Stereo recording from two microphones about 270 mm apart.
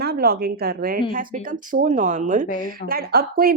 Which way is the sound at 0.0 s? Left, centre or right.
Right.